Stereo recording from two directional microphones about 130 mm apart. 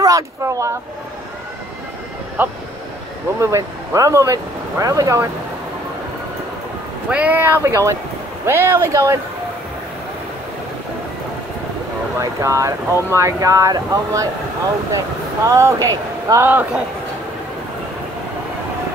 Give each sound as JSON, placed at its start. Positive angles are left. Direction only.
{"t": 0.0, "sound": "speech", "side_deg": -25}
{"t": 2.4, "sound": "speech", "side_deg": -15}
{"t": 7.1, "sound": "speech", "side_deg": -10}
{"t": 12.2, "sound": "speech", "side_deg": -25}
{"t": 15.4, "sound": "speech", "side_deg": -20}